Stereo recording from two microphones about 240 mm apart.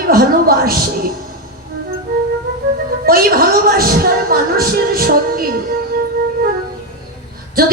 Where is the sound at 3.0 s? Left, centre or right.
Right.